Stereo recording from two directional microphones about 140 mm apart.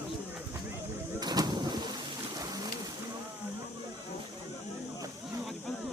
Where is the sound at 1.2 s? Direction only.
30° right (ahead or behind).